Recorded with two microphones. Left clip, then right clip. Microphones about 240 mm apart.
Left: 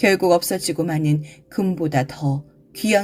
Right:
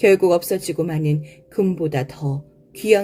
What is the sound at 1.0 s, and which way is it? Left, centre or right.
Speech, left.